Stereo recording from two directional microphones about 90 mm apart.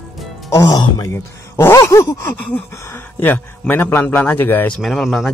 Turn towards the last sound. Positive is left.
turn(degrees=-5)  # may be behind; listen again after turning